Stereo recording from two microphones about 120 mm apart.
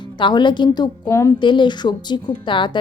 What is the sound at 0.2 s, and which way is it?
A woman's voice, 40° left (ahead or behind).